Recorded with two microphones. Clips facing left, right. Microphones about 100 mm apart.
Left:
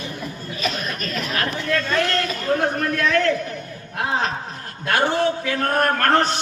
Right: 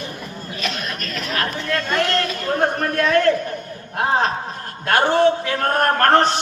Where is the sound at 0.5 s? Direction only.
Centre (ahead or behind).